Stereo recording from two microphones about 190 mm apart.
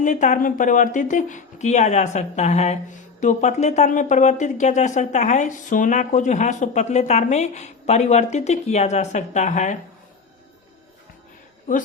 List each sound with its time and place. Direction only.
0.0 s speech: 40° left (ahead or behind)